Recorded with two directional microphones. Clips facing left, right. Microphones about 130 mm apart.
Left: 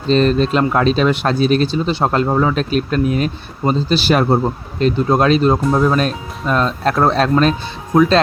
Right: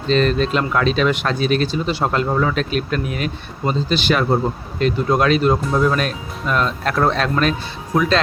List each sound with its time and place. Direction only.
0.1 s speech: 40° left (ahead or behind)